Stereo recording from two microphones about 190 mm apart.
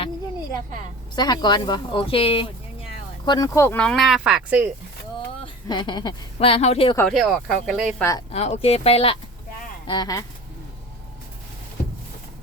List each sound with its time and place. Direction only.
1.1 s speech: 20° left (ahead or behind)
3.2 s speech: 20° left (ahead or behind); by 4.7 s 5° right (ahead or behind)
5.4 s speech: 25° left (ahead or behind)
7.1 s speech: centre (ahead or behind)
8.3 s speech: 35° left (ahead or behind)